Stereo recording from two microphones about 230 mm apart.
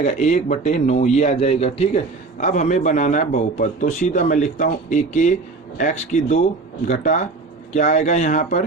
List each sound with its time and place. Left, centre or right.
0.0 s a man's voice: left